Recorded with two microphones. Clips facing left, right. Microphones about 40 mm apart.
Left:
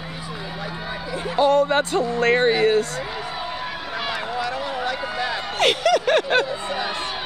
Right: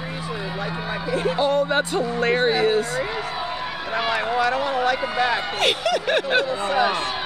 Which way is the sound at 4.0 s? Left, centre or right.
Centre.